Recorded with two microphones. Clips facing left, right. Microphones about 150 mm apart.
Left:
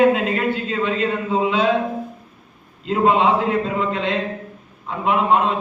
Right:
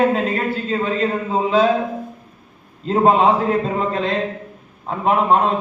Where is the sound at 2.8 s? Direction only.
40° right (ahead or behind).